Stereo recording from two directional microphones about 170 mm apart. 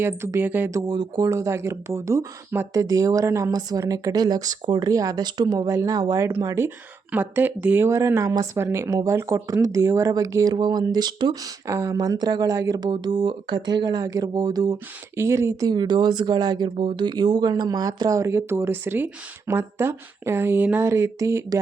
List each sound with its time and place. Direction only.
0.0 s speech: 15° right (ahead or behind)